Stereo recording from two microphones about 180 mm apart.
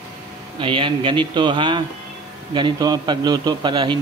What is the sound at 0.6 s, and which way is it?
A man's voice, 30° right (ahead or behind).